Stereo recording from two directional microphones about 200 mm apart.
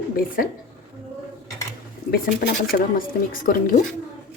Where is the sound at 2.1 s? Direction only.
50° left (ahead or behind).